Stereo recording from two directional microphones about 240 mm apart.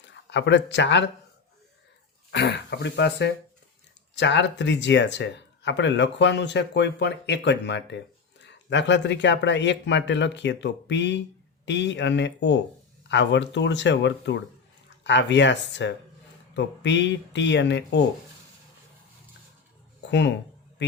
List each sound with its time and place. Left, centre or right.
0.0 s speech: left
2.3 s speech: left
20.1 s speech: left